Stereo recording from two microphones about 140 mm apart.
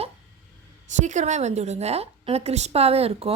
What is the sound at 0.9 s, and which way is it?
A woman's voice, 60° right (ahead or behind).